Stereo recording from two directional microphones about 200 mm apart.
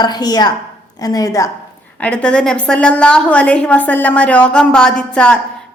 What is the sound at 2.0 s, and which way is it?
A woman's voice, 5° left (ahead or behind).